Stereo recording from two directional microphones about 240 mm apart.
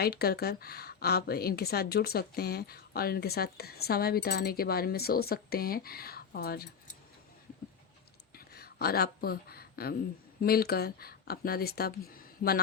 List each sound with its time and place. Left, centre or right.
0.0 s a woman's voice: left
8.4 s a sound: left
10.4 s a woman's voice: left